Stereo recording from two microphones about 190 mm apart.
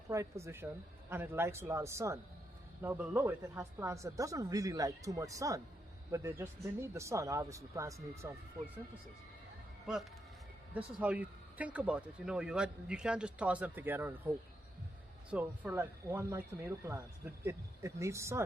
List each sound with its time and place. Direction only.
0.1 s speech: 15° right (ahead or behind)
9.8 s speech: centre (ahead or behind)
15.3 s speech: 5° right (ahead or behind)